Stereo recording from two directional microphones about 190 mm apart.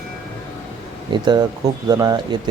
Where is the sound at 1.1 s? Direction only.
25° right (ahead or behind).